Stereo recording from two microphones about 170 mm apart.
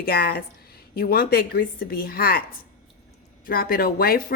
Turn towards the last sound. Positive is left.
turn(degrees=60)  # may be behind; listen again after turning